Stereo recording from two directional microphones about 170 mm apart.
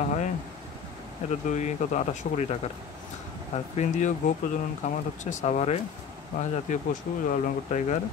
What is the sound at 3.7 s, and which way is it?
Speech, 45° left (ahead or behind).